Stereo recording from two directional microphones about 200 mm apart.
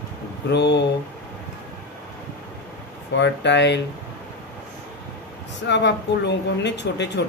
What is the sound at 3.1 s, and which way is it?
Speech, 60° left (ahead or behind).